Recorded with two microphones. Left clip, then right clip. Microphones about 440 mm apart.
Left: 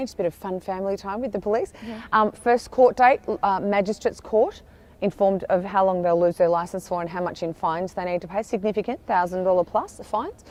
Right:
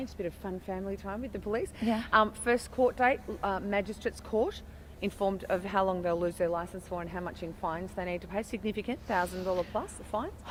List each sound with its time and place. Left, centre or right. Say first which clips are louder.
0.0 s speech: left 11 dB; left